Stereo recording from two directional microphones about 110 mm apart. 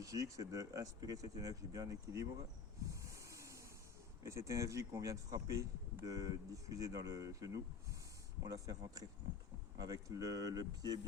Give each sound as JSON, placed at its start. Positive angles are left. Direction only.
{"t": 0.0, "sound": "speech", "side_deg": -30}
{"t": 2.9, "sound": "a sound", "side_deg": -30}
{"t": 4.2, "sound": "speech", "side_deg": -25}